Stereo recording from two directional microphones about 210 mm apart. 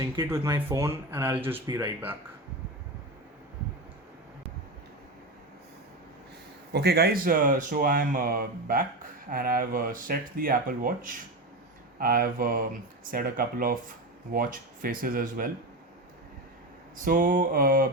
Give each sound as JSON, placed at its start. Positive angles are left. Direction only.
{"t": 0.0, "sound": "speech", "side_deg": -10}
{"t": 6.7, "sound": "speech", "side_deg": -50}
{"t": 17.0, "sound": "a sound", "side_deg": -40}